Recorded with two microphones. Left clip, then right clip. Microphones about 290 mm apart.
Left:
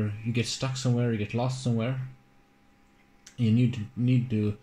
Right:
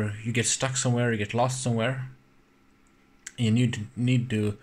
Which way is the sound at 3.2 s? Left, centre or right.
Right.